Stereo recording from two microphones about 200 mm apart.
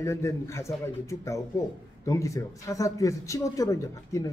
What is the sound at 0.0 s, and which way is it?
A man's voice, 15° left (ahead or behind).